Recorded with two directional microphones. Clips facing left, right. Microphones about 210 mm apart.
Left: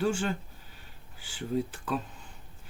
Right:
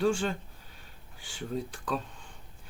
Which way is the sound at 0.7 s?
Centre (ahead or behind).